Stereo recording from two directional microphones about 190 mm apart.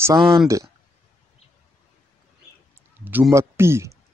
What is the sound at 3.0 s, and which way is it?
Speech, 10° right (ahead or behind).